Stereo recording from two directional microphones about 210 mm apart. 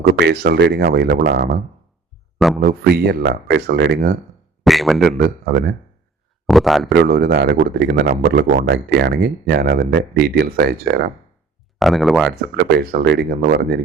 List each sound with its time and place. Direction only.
0.1 s speech: 55° right (ahead or behind)
4.6 s a man's voice: centre (ahead or behind)
5.1 s speech: 45° right (ahead or behind)
6.5 s a man's voice: centre (ahead or behind)
7.0 s speech: 50° right (ahead or behind)
11.8 s a man's voice: centre (ahead or behind)
12.3 s speech: 45° right (ahead or behind)